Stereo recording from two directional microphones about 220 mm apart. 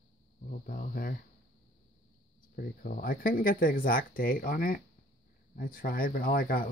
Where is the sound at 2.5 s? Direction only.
40° left (ahead or behind).